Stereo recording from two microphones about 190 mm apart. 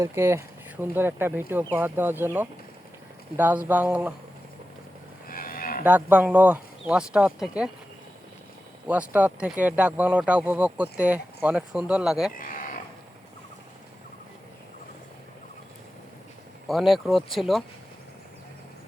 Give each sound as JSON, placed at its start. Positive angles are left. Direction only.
{"t": 0.0, "sound": "speech", "side_deg": -15}
{"t": 5.3, "sound": "moo", "side_deg": 50}
{"t": 5.8, "sound": "speech", "side_deg": -10}
{"t": 8.9, "sound": "speech", "side_deg": -10}
{"t": 12.4, "sound": "speech", "side_deg": 45}
{"t": 16.6, "sound": "speech", "side_deg": 0}